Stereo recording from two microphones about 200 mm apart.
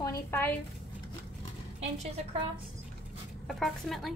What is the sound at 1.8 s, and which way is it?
Speech, 35° right (ahead or behind).